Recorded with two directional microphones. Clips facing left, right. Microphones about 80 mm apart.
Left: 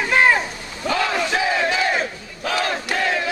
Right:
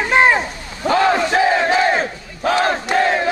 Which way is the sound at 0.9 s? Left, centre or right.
Right.